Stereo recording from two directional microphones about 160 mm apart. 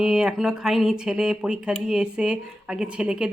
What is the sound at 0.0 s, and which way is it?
A woman's voice, 5° right (ahead or behind).